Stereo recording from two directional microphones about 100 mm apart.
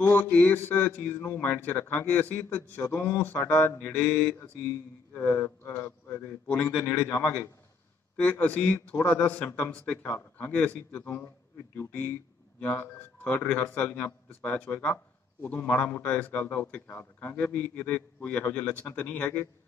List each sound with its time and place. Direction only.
0.2 s a man's voice: 15° left (ahead or behind)
2.8 s mantra: 25° left (ahead or behind)
5.1 s a man's voice: 25° left (ahead or behind)
6.4 s a man's voice: 15° left (ahead or behind)
10.0 s mantra: 20° left (ahead or behind)
11.7 s a man's voice: 15° left (ahead or behind)